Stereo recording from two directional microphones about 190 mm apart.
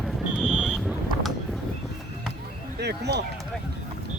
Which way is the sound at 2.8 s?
60° right (ahead or behind).